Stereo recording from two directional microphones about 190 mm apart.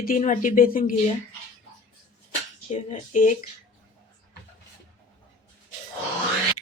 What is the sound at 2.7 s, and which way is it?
Speech, 40° left (ahead or behind).